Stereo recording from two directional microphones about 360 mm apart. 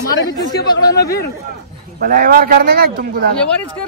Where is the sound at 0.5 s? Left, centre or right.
Centre.